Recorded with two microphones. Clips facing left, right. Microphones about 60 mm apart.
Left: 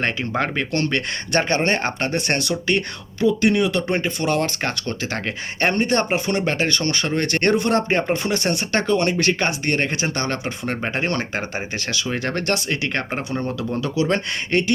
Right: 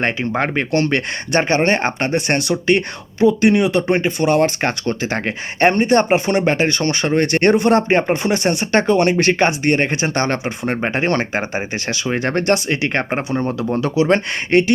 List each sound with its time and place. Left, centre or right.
0.0 s speech: centre